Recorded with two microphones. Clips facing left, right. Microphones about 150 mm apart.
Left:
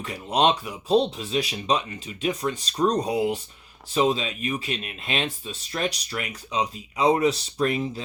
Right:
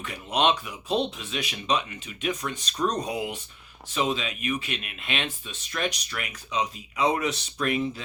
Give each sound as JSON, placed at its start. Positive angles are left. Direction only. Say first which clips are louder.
{"t": 0.0, "sound": "speech", "louder": "left 3 dB", "side_deg": 35}